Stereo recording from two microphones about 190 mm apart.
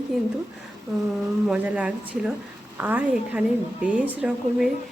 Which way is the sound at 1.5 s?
5° right (ahead or behind).